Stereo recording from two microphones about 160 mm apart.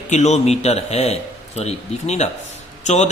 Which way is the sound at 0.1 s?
45° left (ahead or behind).